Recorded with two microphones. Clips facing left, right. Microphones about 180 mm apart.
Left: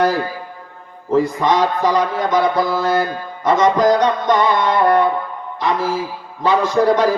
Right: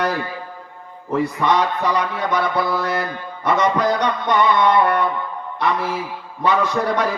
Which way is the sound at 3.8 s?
30° left (ahead or behind).